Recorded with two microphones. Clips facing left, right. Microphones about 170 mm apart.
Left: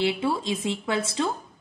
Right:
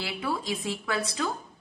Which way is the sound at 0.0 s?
25° left (ahead or behind).